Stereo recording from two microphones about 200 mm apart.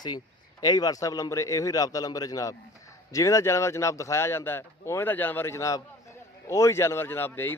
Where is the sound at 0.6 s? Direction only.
20° left (ahead or behind).